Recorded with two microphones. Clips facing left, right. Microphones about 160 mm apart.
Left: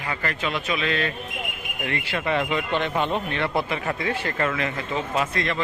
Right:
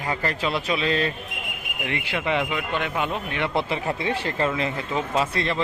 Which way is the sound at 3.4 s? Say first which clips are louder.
Even; 20° right (ahead or behind).